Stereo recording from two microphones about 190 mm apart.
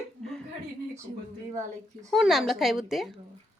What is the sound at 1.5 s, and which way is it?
Speech, 15° right (ahead or behind).